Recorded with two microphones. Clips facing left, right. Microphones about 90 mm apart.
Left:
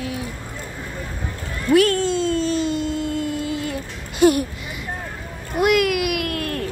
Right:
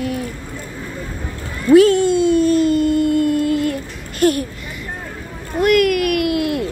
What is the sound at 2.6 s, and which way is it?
Music, 55° right (ahead or behind).